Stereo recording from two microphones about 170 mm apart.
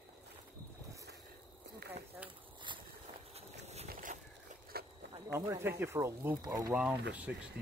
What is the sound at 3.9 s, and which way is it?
Boat, 50° right (ahead or behind).